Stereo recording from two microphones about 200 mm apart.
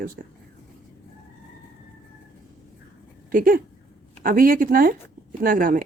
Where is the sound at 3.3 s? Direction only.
45° right (ahead or behind).